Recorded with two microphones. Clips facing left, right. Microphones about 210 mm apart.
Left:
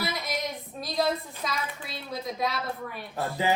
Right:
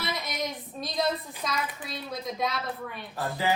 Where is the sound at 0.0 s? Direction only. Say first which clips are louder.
Left 1 dB; centre (ahead or behind).